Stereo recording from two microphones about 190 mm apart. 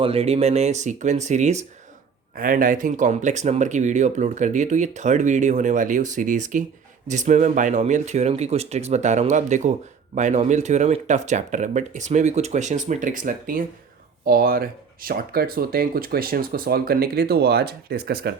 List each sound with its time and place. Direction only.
0.0 s speech: 30° right (ahead or behind); by 18.3 s 55° right (ahead or behind)